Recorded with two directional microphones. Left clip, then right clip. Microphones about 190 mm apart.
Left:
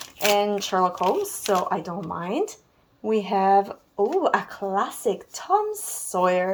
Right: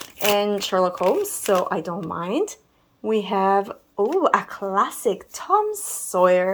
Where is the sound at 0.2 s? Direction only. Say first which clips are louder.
Right 1 dB; 20° right (ahead or behind).